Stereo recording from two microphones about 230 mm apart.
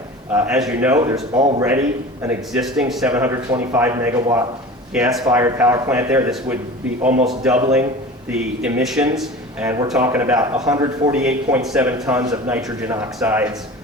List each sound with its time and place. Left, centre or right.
0.3 s a man's voice: centre